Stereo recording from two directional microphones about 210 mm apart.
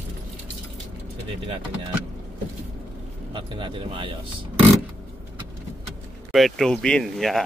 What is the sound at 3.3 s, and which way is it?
Speech, 25° right (ahead or behind).